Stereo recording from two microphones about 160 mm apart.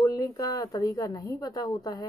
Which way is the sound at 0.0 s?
25° left (ahead or behind).